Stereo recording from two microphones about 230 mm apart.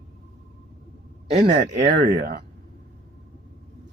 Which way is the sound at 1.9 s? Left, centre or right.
Right.